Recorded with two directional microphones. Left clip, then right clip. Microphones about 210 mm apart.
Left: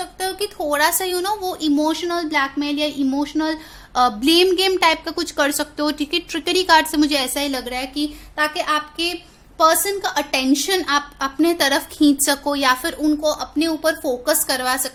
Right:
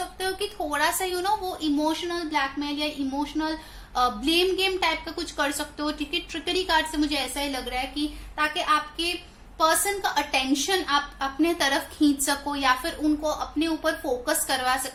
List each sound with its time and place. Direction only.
0.2 s a woman's voice: 50° left (ahead or behind)